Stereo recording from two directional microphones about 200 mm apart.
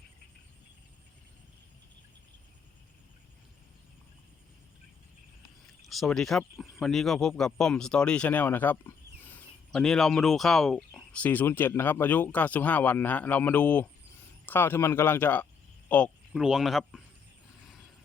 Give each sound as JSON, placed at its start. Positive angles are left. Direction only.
{"t": 5.8, "sound": "speech", "side_deg": 0}